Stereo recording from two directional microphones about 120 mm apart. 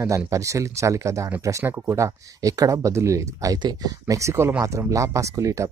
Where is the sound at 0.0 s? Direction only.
25° right (ahead or behind).